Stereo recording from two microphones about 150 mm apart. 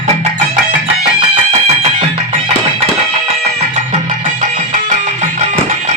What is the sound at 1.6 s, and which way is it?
Music, 45° right (ahead or behind).